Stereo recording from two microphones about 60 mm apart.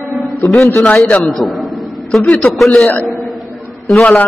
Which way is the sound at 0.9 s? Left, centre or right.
Centre.